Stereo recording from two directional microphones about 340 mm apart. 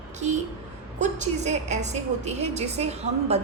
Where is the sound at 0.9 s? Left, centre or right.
Right.